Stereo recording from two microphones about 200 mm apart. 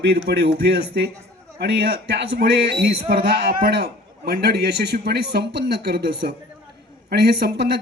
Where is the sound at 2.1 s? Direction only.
55° right (ahead or behind).